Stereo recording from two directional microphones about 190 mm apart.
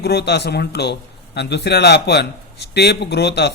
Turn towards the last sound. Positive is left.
turn(degrees=60)  # may be behind; listen again after turning